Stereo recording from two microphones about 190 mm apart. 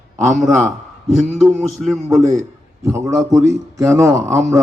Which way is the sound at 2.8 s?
15° right (ahead or behind).